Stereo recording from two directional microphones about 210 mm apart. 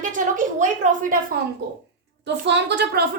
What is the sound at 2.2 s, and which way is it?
Speech, 55° right (ahead or behind).